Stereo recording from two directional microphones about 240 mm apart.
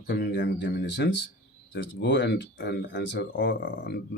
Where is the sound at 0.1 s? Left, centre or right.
Left.